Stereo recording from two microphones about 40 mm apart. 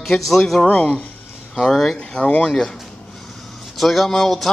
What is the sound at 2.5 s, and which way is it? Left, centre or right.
Speech, centre.